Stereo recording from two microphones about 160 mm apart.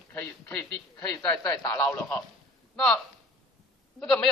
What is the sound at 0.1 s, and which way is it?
A man's voice, 10° left (ahead or behind).